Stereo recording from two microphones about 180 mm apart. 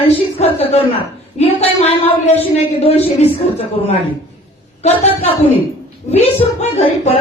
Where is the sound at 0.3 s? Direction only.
35° left (ahead or behind).